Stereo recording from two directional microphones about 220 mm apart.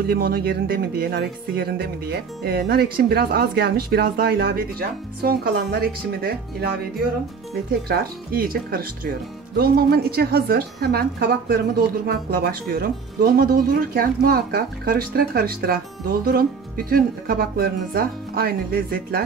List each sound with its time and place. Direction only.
0.0 s speech: 45° right (ahead or behind)
7.9 s speech: 45° right (ahead or behind)